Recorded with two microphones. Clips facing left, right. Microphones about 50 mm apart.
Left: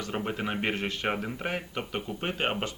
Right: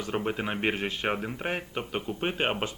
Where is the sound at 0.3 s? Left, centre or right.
Centre.